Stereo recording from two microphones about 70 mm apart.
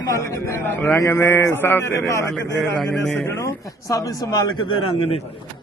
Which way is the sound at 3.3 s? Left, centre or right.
Left.